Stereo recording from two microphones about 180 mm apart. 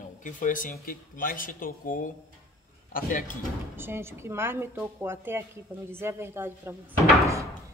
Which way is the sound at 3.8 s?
15° right (ahead or behind).